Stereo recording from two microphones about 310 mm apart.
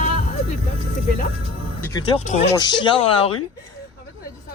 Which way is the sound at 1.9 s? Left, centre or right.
Centre.